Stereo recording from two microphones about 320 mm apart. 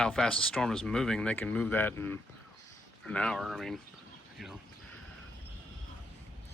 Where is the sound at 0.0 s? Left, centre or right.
Centre.